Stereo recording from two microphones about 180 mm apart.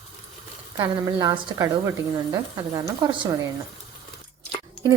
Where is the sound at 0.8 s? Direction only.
20° right (ahead or behind).